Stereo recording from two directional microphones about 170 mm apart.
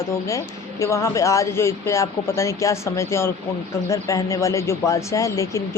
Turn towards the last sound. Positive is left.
turn(degrees=20)  # may be behind; listen again after turning